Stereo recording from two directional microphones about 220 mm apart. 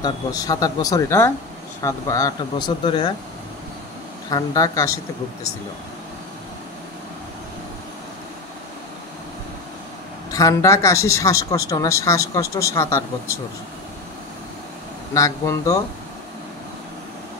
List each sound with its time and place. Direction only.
0.0 s speech: 15° left (ahead or behind)
4.3 s speech: 15° left (ahead or behind)
10.3 s speech: 15° left (ahead or behind)
15.1 s speech: 15° left (ahead or behind)